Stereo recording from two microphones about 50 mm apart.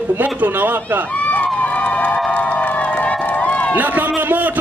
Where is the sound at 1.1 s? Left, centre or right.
Left.